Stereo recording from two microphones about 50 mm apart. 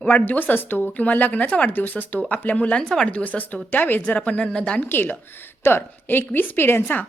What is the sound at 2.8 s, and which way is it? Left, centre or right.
Speech, centre.